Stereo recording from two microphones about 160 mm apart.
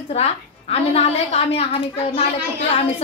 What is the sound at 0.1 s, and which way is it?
A woman's voice, 40° left (ahead or behind).